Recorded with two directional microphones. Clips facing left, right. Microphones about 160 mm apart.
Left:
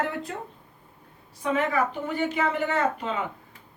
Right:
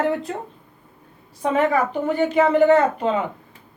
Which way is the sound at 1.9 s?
35° right (ahead or behind).